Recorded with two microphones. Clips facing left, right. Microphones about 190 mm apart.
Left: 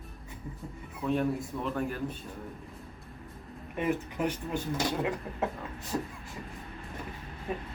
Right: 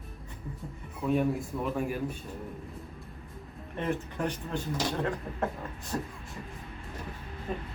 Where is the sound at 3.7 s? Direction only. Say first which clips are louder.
Left 2 dB; 10° left (ahead or behind).